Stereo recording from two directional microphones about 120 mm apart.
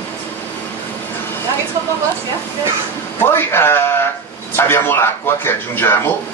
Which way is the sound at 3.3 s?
20° left (ahead or behind).